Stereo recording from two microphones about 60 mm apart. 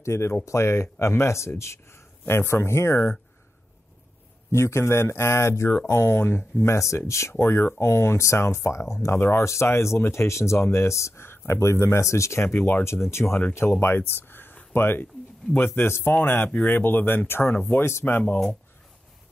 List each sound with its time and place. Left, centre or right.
0.0 s speech: left
2.9 s speech: centre
4.5 s speech: left
12.4 s a man's voice: left
12.8 s a man's voice: left